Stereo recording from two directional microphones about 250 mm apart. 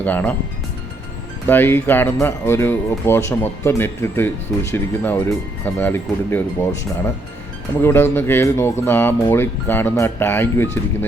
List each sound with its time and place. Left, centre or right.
0.0 s speech: centre
1.5 s speech: centre